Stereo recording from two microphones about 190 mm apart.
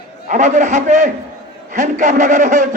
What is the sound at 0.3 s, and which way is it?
A man's voice, 40° right (ahead or behind).